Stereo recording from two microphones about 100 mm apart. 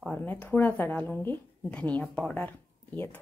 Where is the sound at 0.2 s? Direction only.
15° left (ahead or behind).